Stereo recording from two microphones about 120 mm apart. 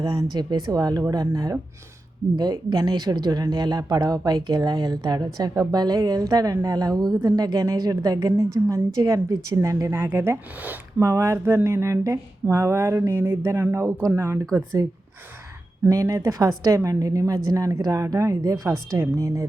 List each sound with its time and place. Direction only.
0.0 s a woman's voice: 25° right (ahead or behind)
15.9 s a woman's voice: 30° right (ahead or behind)